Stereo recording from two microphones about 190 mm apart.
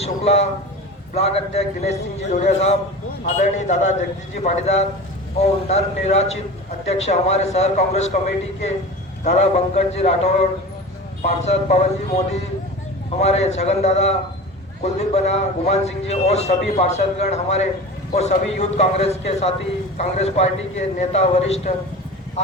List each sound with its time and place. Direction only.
0.0 s a man's voice: 35° left (ahead or behind)
9.2 s a man's voice: 35° left (ahead or behind)